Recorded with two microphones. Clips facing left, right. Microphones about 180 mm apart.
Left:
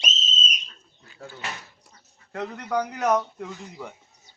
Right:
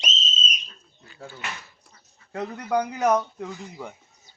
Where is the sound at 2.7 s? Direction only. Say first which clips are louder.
Right 2 dB; 20° right (ahead or behind).